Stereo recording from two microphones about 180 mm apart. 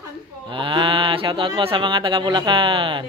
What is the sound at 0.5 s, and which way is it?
Speech, 25° right (ahead or behind).